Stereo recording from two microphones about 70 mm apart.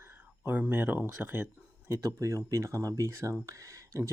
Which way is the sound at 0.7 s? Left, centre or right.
Right.